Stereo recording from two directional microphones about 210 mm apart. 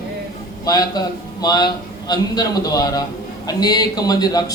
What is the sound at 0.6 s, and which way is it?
Speech, 15° left (ahead or behind).